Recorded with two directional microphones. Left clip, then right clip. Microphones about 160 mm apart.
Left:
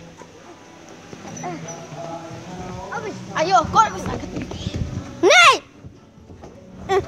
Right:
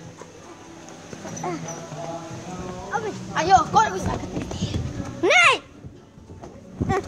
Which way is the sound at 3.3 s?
40° left (ahead or behind).